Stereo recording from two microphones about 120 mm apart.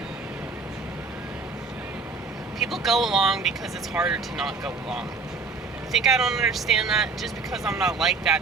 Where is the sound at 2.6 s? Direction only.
Centre (ahead or behind).